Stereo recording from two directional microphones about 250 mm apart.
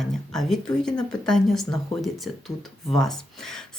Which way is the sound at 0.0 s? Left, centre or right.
Centre.